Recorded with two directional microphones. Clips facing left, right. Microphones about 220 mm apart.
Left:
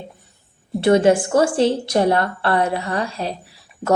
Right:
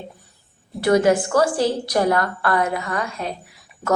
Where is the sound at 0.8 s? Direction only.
25° left (ahead or behind).